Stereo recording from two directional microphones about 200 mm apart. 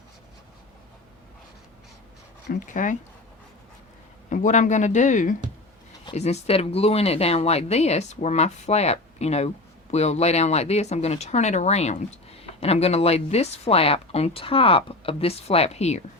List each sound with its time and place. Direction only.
2.5 s speech: 40° left (ahead or behind)
4.3 s speech: 40° left (ahead or behind)